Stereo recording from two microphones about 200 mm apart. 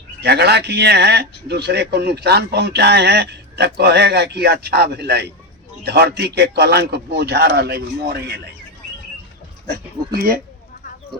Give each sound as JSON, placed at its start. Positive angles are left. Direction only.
{"t": 0.2, "sound": "a man's voice", "side_deg": -55}
{"t": 9.6, "sound": "speech", "side_deg": -50}